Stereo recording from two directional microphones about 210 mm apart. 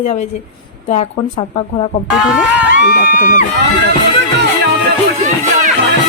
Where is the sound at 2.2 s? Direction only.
5° right (ahead or behind).